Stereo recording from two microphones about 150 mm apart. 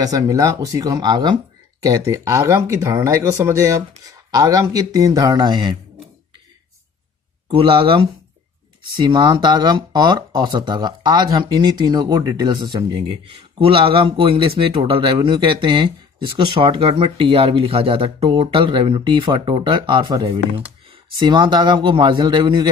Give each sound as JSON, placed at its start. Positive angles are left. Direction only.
{"t": 0.0, "sound": "speech", "side_deg": -25}
{"t": 7.4, "sound": "speech", "side_deg": -35}